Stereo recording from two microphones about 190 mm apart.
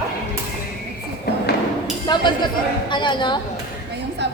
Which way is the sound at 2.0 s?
25° left (ahead or behind).